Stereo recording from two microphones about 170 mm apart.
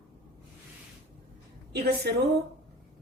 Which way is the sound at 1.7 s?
70° right (ahead or behind).